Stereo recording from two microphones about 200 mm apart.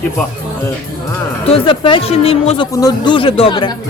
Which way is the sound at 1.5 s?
25° left (ahead or behind).